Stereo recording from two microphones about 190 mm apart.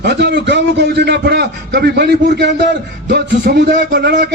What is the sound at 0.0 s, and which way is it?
A man's voice, 65° right (ahead or behind).